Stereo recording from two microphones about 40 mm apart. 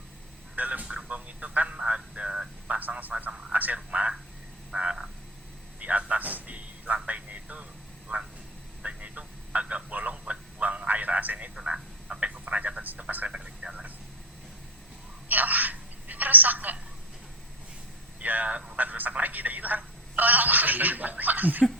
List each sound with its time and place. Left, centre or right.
0.5 s vehicle: right
1.0 s a sound: right
1.9 s speech: right
2.6 s speech: right
4.7 s frog: right
5.8 s a sound: right
8.1 s frog: right
8.8 s a sound: right
11.6 s telephone: right
13.0 s speech: right
13.2 s speech: right
15.3 s telephone: right
18.2 s speech: right